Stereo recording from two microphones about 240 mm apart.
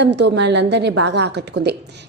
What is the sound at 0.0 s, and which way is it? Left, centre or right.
A woman's voice, right.